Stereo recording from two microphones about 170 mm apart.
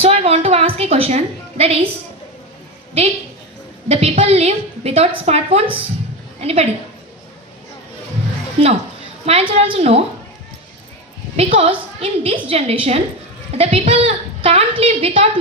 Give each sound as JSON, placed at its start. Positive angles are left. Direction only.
{"t": 0.0, "sound": "a sound", "side_deg": -35}
{"t": 3.8, "sound": "a woman's voice", "side_deg": -35}
{"t": 8.6, "sound": "a woman's voice", "side_deg": -35}
{"t": 11.5, "sound": "a woman's voice", "side_deg": -35}